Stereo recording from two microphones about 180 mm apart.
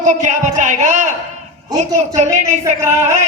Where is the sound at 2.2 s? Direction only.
40° right (ahead or behind).